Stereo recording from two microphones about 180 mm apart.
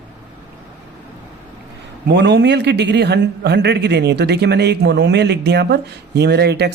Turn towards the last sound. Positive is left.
turn(degrees=-70)  # may be behind; listen again after turning